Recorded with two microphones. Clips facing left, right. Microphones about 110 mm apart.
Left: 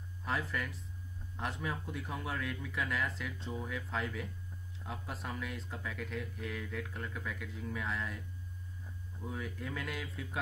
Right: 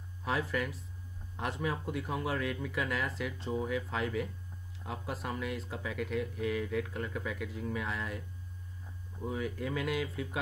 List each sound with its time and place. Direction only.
0.2 s speech: centre (ahead or behind)
9.2 s speech: 5° right (ahead or behind)